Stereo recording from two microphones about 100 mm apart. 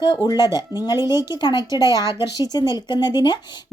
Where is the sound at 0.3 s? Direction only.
45° left (ahead or behind).